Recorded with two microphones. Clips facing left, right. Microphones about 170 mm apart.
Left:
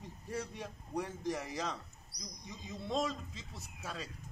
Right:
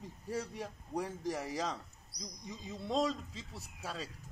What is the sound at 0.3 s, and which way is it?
Speech, 35° right (ahead or behind).